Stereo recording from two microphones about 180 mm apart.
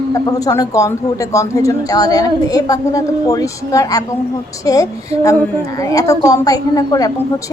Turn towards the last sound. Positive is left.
turn(degrees=20)  # may be behind; listen again after turning